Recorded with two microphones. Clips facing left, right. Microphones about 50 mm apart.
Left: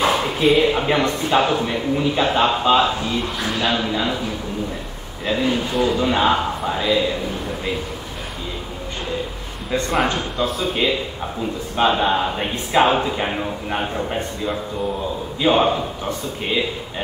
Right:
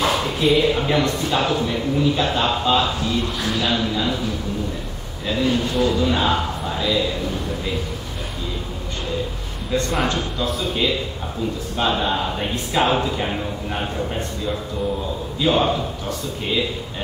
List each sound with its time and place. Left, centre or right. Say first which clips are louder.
0.0 s a sound: left 2 dB; centre
0.6 s a man's voice: left 1 dB; centre
9.7 s a man's voice: even; centre
10.1 s a man's voice: left 1 dB; centre
10.7 s a man's voice: left 1 dB; centre